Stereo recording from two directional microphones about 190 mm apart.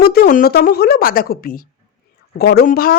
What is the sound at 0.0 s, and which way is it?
A woman's voice, 55° left (ahead or behind).